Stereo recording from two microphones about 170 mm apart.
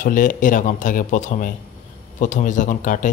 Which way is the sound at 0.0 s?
50° left (ahead or behind).